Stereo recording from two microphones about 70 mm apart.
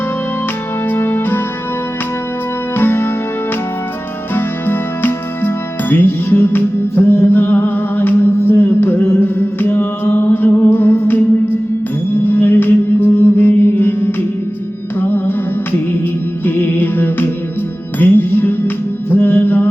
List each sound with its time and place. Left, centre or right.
0.9 s music: left
2.7 s music: left
4.4 s music: left
16.5 s music: left